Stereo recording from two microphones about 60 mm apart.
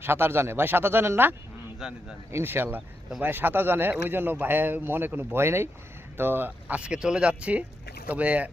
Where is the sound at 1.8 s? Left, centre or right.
Centre.